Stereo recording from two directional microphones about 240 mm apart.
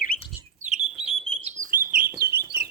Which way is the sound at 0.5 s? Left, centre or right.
Right.